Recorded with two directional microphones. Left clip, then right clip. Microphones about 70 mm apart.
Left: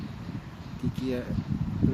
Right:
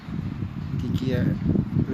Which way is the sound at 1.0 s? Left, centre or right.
Right.